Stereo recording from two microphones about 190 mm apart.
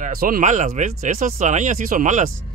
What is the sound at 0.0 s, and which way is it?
Speech, 50° right (ahead or behind).